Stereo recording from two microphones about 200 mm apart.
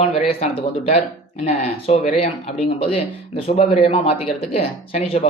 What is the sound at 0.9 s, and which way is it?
A man's voice, 30° left (ahead or behind).